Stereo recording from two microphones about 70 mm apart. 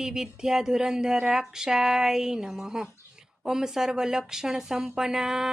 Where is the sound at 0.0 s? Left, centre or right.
Centre.